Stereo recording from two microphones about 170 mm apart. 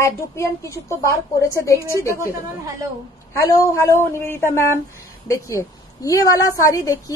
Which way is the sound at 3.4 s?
15° left (ahead or behind).